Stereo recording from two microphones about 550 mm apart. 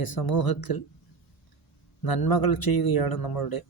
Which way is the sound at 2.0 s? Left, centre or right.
Left.